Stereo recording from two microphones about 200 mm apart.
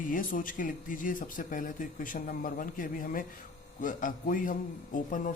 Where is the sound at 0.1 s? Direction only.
40° left (ahead or behind).